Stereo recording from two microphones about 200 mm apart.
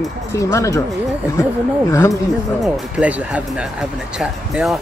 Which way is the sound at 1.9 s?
15° left (ahead or behind).